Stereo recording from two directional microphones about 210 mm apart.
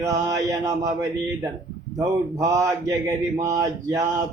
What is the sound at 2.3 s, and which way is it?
Mantra, 15° right (ahead or behind).